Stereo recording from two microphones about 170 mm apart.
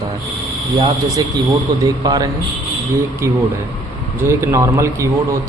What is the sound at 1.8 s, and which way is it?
Speech, 25° right (ahead or behind).